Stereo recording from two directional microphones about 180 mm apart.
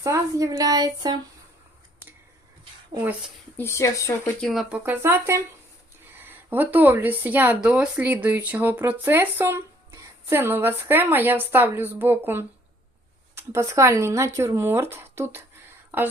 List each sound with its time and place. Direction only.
0.0 s a woman's voice: 15° right (ahead or behind)
3.6 s speech: 15° left (ahead or behind)
4.4 s speech: centre (ahead or behind)
4.8 s speech: 10° right (ahead or behind)